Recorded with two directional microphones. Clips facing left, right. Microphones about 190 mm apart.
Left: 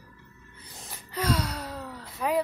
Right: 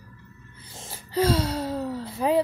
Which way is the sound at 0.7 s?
30° right (ahead or behind).